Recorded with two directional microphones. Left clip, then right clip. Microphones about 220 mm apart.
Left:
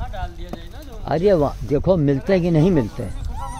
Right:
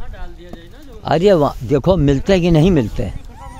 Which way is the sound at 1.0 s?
40° right (ahead or behind).